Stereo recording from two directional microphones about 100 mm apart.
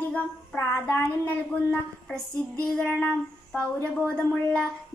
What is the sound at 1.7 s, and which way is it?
Female singing, 10° left (ahead or behind).